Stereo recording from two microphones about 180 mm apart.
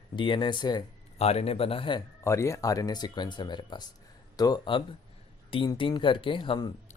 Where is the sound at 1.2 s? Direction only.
35° left (ahead or behind).